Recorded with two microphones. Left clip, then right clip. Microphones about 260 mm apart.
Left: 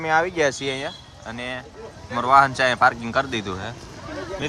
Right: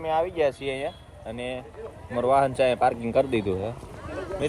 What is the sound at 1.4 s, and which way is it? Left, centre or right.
Speech, left.